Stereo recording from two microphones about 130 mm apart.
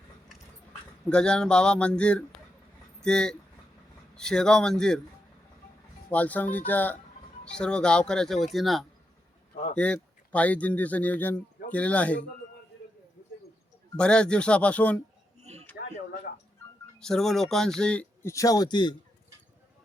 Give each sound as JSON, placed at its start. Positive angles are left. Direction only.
{"t": 1.1, "sound": "speech", "side_deg": 5}
{"t": 6.1, "sound": "speech", "side_deg": 10}
{"t": 13.9, "sound": "speech", "side_deg": 5}
{"t": 15.4, "sound": "a sound", "side_deg": -55}
{"t": 17.0, "sound": "speech", "side_deg": 5}
{"t": 18.2, "sound": "a man's voice", "side_deg": 25}